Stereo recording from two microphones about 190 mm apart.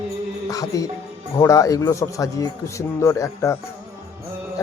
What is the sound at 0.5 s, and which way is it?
Music, 15° left (ahead or behind).